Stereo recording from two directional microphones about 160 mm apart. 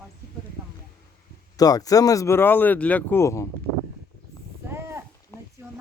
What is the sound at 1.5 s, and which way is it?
Speech, 25° left (ahead or behind).